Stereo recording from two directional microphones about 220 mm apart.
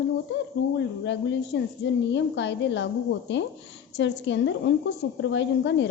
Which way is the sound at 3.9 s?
55° left (ahead or behind).